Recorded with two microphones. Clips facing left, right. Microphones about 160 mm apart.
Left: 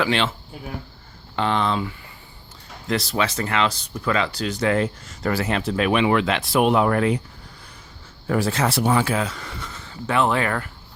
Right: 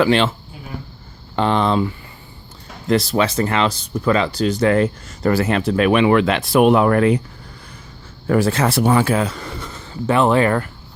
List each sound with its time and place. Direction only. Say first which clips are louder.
0.0 s speech: right 6 dB; 45° right (ahead or behind)
1.4 s speech: right 5 dB; 40° right (ahead or behind)
2.9 s speech: right 6 dB; 35° right (ahead or behind)
4.7 s speech: right 5 dB; 50° right (ahead or behind)
8.3 s speech: right 5 dB; 60° right (ahead or behind)
9.2 s speech: right 5 dB; 35° right (ahead or behind)